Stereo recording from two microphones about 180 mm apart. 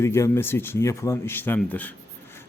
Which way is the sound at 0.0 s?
15° left (ahead or behind).